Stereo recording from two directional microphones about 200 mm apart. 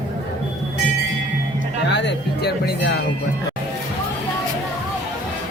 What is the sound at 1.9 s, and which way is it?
Music, 60° left (ahead or behind).